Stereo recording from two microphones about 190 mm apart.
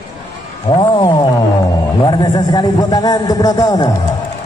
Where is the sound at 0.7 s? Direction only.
25° left (ahead or behind).